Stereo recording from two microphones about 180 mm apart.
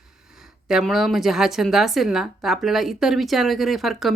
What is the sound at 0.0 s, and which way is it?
Speech, 5° right (ahead or behind).